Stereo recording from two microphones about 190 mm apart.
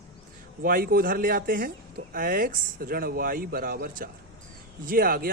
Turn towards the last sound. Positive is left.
turn(degrees=-50)  # may be behind; listen again after turning